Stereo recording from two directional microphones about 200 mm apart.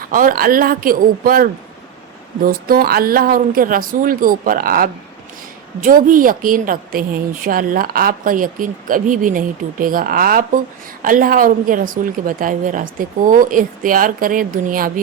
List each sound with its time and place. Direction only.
0.0 s a woman's voice: 45° right (ahead or behind)